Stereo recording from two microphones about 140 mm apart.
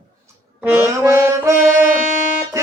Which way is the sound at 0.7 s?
15° right (ahead or behind).